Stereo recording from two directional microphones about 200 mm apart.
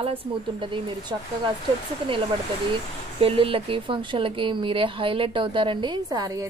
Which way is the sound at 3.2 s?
30° right (ahead or behind).